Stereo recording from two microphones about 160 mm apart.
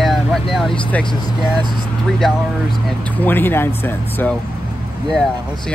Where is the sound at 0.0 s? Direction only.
Centre (ahead or behind).